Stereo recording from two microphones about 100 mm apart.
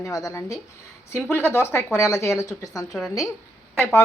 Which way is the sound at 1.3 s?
25° left (ahead or behind).